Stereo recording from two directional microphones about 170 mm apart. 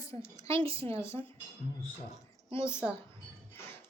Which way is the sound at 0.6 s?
35° right (ahead or behind).